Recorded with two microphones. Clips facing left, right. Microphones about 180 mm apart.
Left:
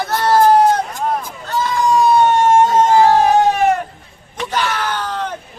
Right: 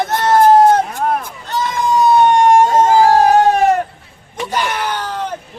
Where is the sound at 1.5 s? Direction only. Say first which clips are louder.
Left 1 dB; 20° right (ahead or behind).